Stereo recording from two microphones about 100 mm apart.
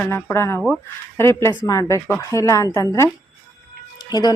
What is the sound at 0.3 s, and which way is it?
Speech, 25° left (ahead or behind).